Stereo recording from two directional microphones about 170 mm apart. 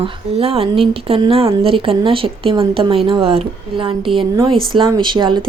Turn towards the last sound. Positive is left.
turn(degrees=-25)  # may be behind; listen again after turning